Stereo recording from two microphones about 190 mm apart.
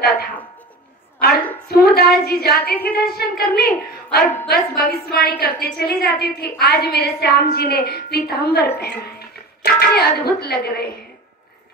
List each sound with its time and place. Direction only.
1.2 s a sound: 55° left (ahead or behind)
1.7 s a woman's voice: 55° left (ahead or behind)
4.2 s a woman's voice: 10° left (ahead or behind)
4.5 s a woman's voice: 55° left (ahead or behind)